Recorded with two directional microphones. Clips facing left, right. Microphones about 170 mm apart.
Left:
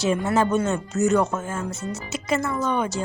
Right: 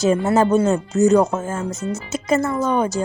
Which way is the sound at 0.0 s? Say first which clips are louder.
Right 5 dB; 40° right (ahead or behind).